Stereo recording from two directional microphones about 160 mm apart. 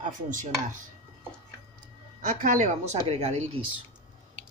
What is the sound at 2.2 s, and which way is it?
Speech, 55° right (ahead or behind).